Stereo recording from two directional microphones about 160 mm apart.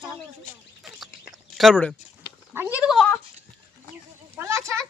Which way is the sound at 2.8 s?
Centre (ahead or behind).